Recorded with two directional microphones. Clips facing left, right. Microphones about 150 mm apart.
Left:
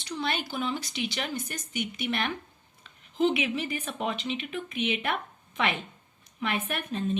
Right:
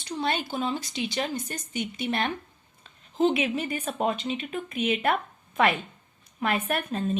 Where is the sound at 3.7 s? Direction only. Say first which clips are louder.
Right 4 dB; 45° right (ahead or behind).